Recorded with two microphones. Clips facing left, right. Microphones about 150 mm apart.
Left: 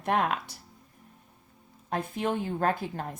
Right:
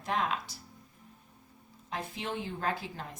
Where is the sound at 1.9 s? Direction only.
50° left (ahead or behind).